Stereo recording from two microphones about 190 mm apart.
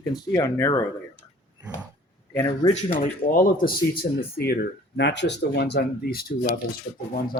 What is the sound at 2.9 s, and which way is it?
Speech, 50° left (ahead or behind).